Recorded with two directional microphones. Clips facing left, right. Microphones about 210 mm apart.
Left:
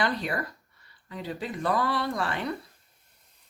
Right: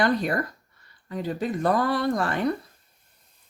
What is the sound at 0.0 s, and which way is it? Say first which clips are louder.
Speech: right 6 dB; 45° right (ahead or behind).